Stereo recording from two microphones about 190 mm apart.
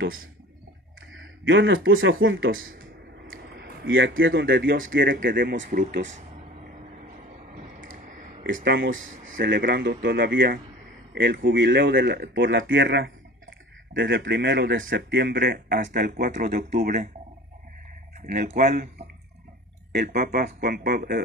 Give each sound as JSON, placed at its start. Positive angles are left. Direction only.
{"t": 1.2, "sound": "speech", "side_deg": -80}
{"t": 3.3, "sound": "speech", "side_deg": -75}
{"t": 5.3, "sound": "speech", "side_deg": -55}
{"t": 8.5, "sound": "speech", "side_deg": -60}
{"t": 9.1, "sound": "speech", "side_deg": -40}
{"t": 9.4, "sound": "speech", "side_deg": -55}
{"t": 11.1, "sound": "speech", "side_deg": -65}
{"t": 18.2, "sound": "speech", "side_deg": -50}
{"t": 19.9, "sound": "speech", "side_deg": -55}